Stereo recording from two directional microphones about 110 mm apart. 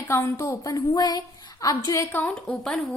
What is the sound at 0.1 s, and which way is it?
Speech, 25° left (ahead or behind).